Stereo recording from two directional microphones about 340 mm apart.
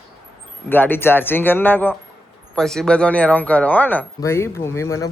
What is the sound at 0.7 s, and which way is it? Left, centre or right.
Speech, centre.